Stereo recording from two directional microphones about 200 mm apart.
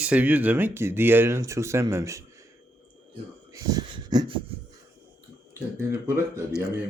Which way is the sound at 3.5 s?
20° right (ahead or behind).